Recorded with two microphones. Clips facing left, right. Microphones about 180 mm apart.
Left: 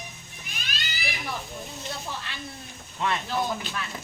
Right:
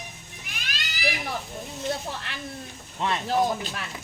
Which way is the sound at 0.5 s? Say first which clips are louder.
Even; 90° right.